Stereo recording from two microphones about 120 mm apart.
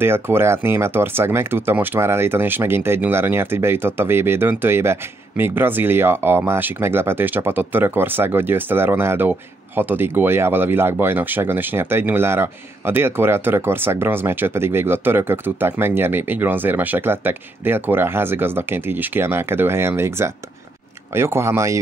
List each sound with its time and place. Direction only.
0.0 s speech: 20° right (ahead or behind)